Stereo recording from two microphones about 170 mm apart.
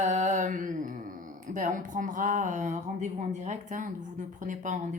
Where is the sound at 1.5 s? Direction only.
50° right (ahead or behind).